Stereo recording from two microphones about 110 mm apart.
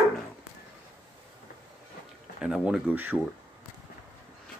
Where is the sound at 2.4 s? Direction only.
5° right (ahead or behind).